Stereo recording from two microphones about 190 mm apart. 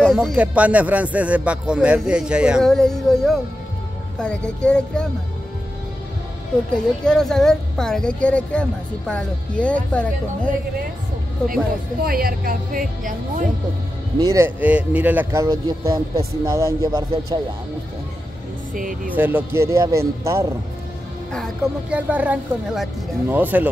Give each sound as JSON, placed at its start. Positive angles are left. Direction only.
{"t": 0.0, "sound": "speech", "side_deg": 0}
{"t": 7.1, "sound": "speech", "side_deg": 0}
{"t": 12.0, "sound": "speech", "side_deg": -50}
{"t": 14.2, "sound": "speech", "side_deg": -15}
{"t": 18.8, "sound": "speech", "side_deg": -45}
{"t": 19.1, "sound": "speech", "side_deg": -10}
{"t": 21.9, "sound": "speech", "side_deg": -10}